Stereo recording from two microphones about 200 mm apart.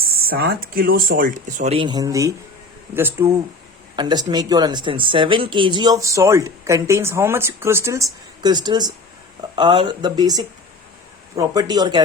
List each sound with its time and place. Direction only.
0.0 s speech: 50° right (ahead or behind); by 12.0 s 20° right (ahead or behind)